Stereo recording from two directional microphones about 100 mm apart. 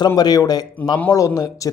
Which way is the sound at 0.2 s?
40° left (ahead or behind).